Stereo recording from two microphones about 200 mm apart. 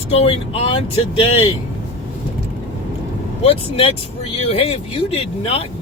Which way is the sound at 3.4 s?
30° left (ahead or behind).